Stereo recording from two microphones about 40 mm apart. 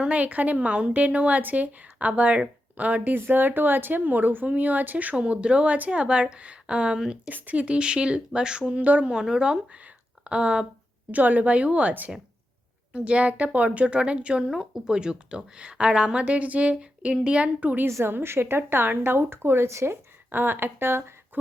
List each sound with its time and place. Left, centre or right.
0.0 s a woman's voice: right
3.2 s speech: right
5.1 s speech: right
7.3 s speech: right
8.8 s a woman's voice: right
9.1 s speech: centre
9.7 s a sound: right
11.1 s a woman's voice: right
17.8 s a woman's voice: right
20.3 s a woman's voice: right